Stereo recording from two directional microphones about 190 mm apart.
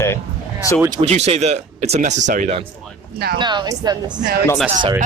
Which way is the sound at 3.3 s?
25° right (ahead or behind).